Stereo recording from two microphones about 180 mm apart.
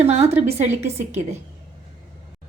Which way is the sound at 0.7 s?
15° right (ahead or behind).